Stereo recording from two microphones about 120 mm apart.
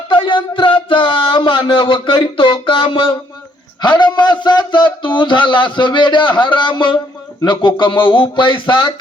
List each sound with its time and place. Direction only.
0.1 s speech: 40° left (ahead or behind)